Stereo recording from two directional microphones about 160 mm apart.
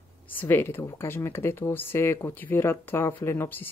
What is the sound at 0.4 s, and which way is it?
Speech, 15° left (ahead or behind).